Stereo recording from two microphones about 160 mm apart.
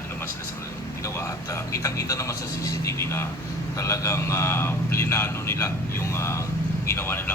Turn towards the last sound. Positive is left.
turn(degrees=15)  # may be behind; listen again after turning